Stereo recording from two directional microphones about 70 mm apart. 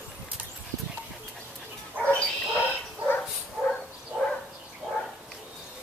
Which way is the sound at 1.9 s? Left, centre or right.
Right.